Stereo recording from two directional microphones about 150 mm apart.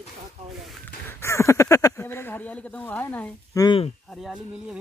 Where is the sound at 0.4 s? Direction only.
45° right (ahead or behind).